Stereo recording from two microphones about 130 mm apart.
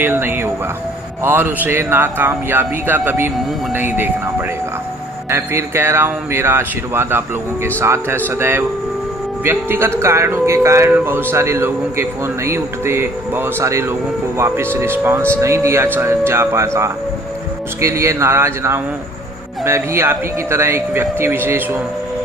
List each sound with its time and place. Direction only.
0.0 s speech: 15° right (ahead or behind)